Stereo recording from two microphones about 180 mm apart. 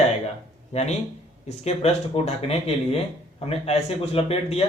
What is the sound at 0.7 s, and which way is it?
Speech, 35° left (ahead or behind).